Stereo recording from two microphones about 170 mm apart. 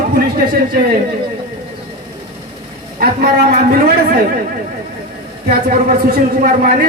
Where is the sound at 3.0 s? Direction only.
60° right (ahead or behind).